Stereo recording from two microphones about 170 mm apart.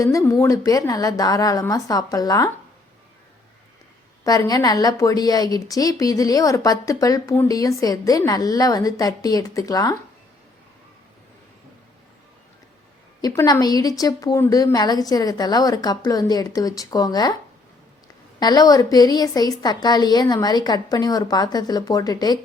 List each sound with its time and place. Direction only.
0.0 s a woman's voice: 20° left (ahead or behind)
4.2 s a woman's voice: 20° left (ahead or behind)
13.2 s a woman's voice: 20° left (ahead or behind)
18.3 s a woman's voice: 25° left (ahead or behind)